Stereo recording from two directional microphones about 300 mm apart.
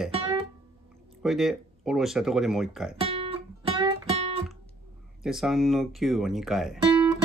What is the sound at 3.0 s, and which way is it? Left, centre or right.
Guitar, centre.